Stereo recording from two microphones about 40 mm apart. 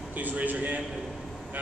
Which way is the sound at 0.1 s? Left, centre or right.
Right.